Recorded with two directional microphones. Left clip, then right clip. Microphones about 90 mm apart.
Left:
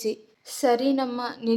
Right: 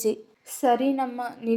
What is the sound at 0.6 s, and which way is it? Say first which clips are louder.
Speech: even; 10° left (ahead or behind).